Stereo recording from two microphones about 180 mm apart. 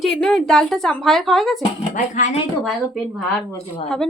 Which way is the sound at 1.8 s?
40° left (ahead or behind).